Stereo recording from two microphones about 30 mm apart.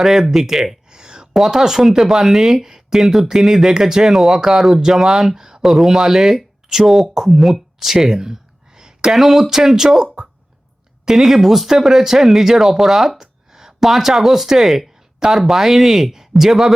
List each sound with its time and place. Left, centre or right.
0.0 s speech: centre
0.9 s a sound: right
1.4 s speech: centre
4.1 s speech: centre
4.4 s speech: centre
4.9 s speech: centre
5.4 s a sound: centre
5.6 s speech: centre
7.1 s speech: centre
7.3 s speech: centre
8.8 s a sound: right
9.1 s speech: centre